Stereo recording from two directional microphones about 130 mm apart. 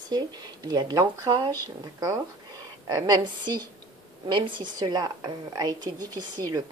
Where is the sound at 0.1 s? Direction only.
30° right (ahead or behind).